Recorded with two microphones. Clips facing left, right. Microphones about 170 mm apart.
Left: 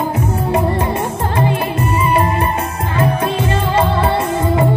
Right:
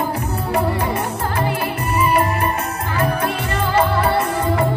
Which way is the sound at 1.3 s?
25° left (ahead or behind).